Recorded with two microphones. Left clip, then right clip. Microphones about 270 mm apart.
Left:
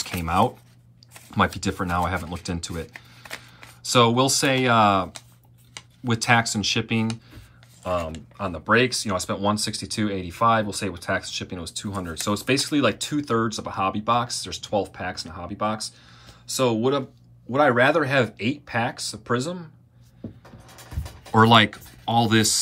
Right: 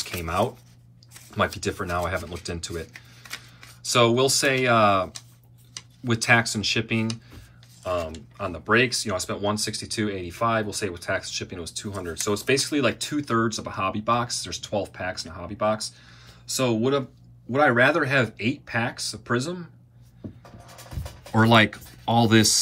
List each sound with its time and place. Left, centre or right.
0.2 s a sound: centre
1.3 s speech: centre
2.9 s camera: left
3.8 s speech: centre
8.4 s speech: centre
21.3 s speech: centre